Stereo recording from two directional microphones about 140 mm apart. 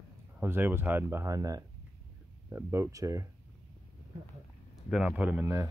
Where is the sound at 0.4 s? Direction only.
15° right (ahead or behind).